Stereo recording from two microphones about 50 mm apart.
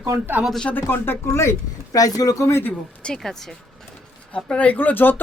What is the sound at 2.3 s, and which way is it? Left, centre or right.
Speech, left.